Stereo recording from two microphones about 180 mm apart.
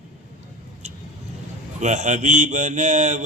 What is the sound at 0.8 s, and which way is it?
Vehicle, 40° right (ahead or behind).